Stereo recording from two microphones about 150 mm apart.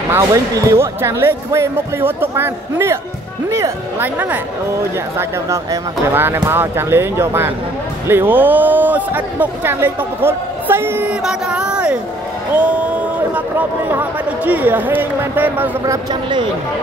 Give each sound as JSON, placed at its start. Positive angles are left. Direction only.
{"t": 0.1, "sound": "speech", "side_deg": -20}
{"t": 5.5, "sound": "speech", "side_deg": -15}
{"t": 15.8, "sound": "speech", "side_deg": -25}